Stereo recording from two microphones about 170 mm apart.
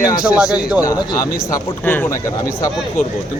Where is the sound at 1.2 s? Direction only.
15° left (ahead or behind).